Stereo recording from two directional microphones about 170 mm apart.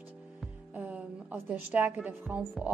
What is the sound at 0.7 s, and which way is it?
Speech, 10° right (ahead or behind).